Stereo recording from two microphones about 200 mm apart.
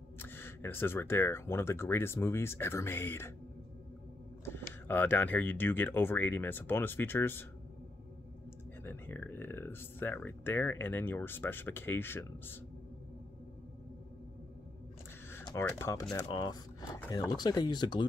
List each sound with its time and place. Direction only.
0.2 s speech: 10° left (ahead or behind)
4.5 s speech: 10° left (ahead or behind)
8.8 s speech: 10° left (ahead or behind)
15.3 s speech: 15° left (ahead or behind)